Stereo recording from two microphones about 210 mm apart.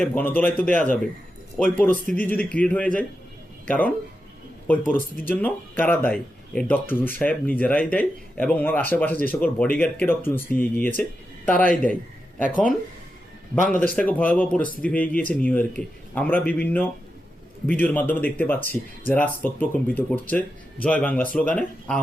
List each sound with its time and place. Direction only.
0.0 s speech: 10° left (ahead or behind)
4.9 s speech: 45° left (ahead or behind)
5.3 s speech: 10° left (ahead or behind)
13.7 s speech: 5° left (ahead or behind)